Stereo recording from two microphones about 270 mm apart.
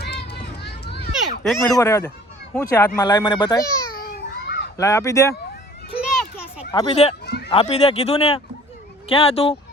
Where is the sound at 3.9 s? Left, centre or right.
Left.